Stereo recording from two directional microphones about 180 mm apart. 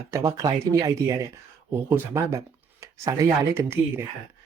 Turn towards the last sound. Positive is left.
turn(degrees=-15)  # may be behind; listen again after turning